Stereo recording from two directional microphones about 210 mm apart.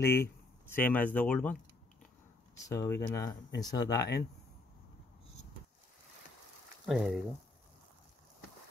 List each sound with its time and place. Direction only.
0.0 s speech: 10° left (ahead or behind)
6.9 s speech: centre (ahead or behind)